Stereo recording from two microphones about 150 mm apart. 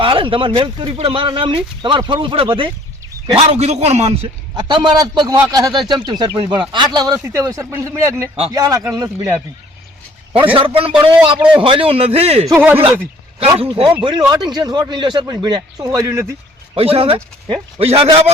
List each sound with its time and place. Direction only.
0.0 s a man's voice: 35° right (ahead or behind)
4.5 s speech: 30° right (ahead or behind)
10.3 s speech: 35° right (ahead or behind)
12.5 s speech: 15° right (ahead or behind)
13.6 s speech: 35° right (ahead or behind); by 16.2 s 20° right (ahead or behind)
16.7 s speech: 40° right (ahead or behind)